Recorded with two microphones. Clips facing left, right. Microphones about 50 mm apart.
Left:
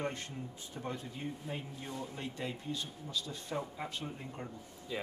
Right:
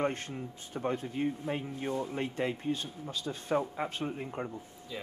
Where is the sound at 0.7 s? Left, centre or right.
Right.